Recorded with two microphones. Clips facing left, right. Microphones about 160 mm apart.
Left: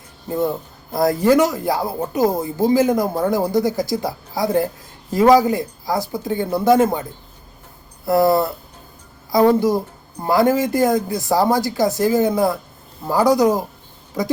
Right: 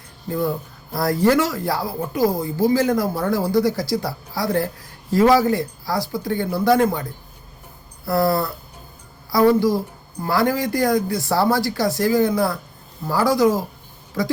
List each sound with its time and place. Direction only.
0.3 s speech: 20° left (ahead or behind)